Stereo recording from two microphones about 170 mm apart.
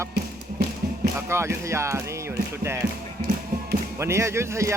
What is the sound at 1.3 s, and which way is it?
Speech, 15° right (ahead or behind).